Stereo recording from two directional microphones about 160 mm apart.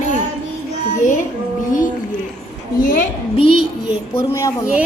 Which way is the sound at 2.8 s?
60° left (ahead or behind).